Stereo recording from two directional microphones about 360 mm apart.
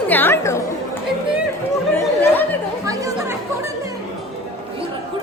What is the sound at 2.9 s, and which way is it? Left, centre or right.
Chatter, centre.